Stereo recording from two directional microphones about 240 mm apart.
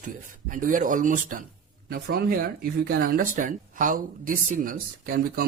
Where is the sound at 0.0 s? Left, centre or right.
Right.